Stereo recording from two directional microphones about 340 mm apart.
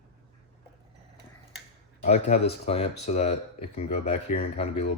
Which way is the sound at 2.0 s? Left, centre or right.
Centre.